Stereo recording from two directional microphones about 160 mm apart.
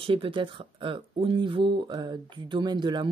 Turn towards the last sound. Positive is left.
turn(degrees=-30)  # may be behind; listen again after turning